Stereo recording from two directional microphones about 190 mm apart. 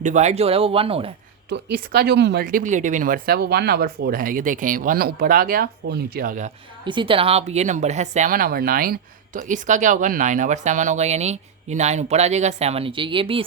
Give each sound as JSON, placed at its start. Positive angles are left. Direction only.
{"t": 0.0, "sound": "speech", "side_deg": -40}
{"t": 1.5, "sound": "speech", "side_deg": -60}
{"t": 6.8, "sound": "speech", "side_deg": -25}